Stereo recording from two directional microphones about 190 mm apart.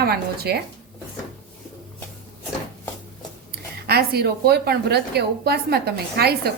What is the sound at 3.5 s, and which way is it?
Speech, 55° right (ahead or behind).